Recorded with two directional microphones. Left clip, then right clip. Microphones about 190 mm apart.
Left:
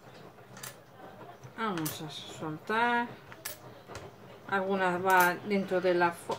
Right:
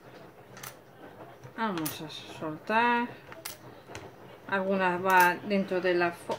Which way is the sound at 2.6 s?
20° right (ahead or behind).